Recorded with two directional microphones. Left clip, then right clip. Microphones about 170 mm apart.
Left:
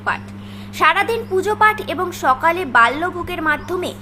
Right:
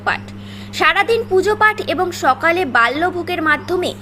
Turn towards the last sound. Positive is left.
turn(degrees=-10)  # may be behind; listen again after turning